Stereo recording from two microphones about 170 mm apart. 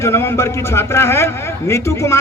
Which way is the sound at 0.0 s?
15° left (ahead or behind).